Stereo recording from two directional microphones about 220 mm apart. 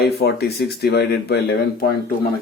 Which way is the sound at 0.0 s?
45° left (ahead or behind).